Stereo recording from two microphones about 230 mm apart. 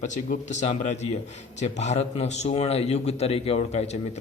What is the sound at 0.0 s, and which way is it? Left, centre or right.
A man's voice, left.